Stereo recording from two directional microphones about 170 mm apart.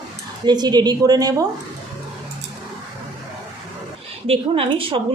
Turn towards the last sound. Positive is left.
turn(degrees=-30)  # may be behind; listen again after turning